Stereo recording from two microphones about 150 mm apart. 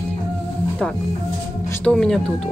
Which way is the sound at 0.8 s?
5° left (ahead or behind).